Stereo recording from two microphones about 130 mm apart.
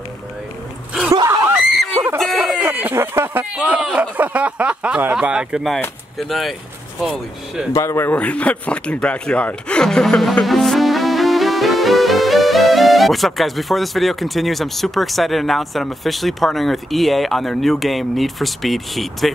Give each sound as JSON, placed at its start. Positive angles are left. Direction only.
{"t": 1.1, "sound": "screaming", "side_deg": -25}
{"t": 2.6, "sound": "a sound", "side_deg": -15}
{"t": 3.5, "sound": "speech", "side_deg": -10}
{"t": 7.7, "sound": "speech", "side_deg": 20}